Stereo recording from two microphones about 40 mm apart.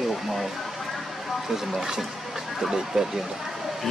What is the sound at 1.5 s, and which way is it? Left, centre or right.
Speech, centre.